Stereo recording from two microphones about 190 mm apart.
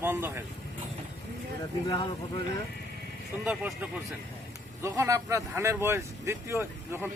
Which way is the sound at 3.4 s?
10° right (ahead or behind).